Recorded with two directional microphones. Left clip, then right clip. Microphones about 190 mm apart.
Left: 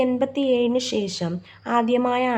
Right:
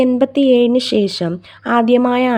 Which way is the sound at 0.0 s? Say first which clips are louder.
Right 8 dB; 35° right (ahead or behind).